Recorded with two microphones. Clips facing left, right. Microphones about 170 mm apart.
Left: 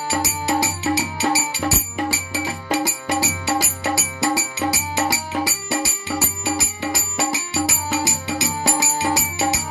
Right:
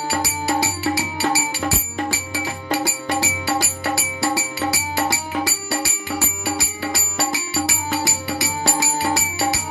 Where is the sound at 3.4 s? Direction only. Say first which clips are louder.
Even; 20° left (ahead or behind).